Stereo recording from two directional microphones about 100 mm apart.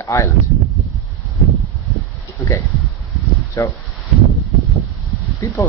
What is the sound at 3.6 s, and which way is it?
Speech, 30° left (ahead or behind).